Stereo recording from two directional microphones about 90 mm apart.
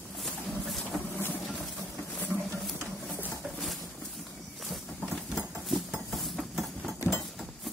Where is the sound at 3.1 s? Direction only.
20° left (ahead or behind).